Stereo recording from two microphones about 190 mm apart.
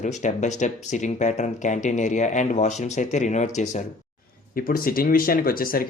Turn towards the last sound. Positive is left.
turn(degrees=50)  # may be behind; listen again after turning